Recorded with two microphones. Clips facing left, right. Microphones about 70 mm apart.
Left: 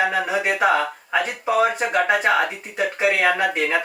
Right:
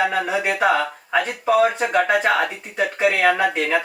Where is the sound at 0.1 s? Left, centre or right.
Centre.